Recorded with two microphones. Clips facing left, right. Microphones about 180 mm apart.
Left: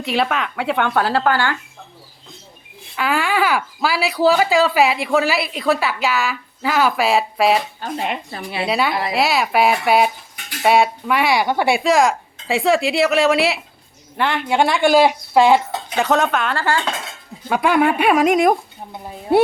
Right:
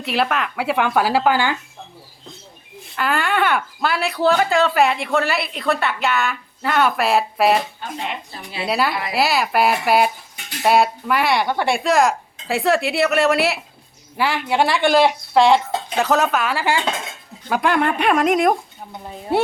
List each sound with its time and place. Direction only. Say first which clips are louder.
0.0 s speech: left 1 dB; centre (ahead or behind)
2.9 s speech: left 1 dB; centre (ahead or behind)
8.0 s a woman's voice: left 4 dB; 65° left (ahead or behind)
8.6 s speech: left 1 dB; centre (ahead or behind)
17.5 s speech: left 3 dB; 5° left (ahead or behind)